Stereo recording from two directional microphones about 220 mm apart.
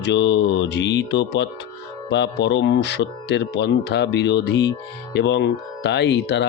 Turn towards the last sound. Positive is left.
turn(degrees=50)  # may be behind; listen again after turning